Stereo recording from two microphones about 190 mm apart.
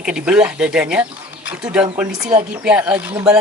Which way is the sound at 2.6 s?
5° right (ahead or behind).